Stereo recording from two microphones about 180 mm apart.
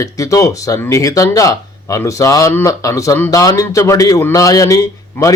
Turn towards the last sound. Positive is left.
turn(degrees=20)  # may be behind; listen again after turning